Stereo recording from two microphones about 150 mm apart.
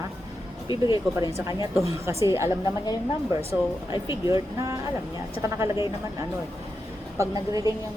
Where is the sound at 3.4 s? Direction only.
35° left (ahead or behind).